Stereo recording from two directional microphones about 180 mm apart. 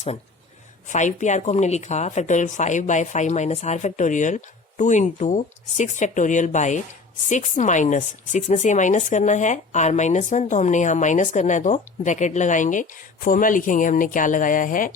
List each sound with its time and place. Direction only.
0.9 s a woman's voice: 40° left (ahead or behind)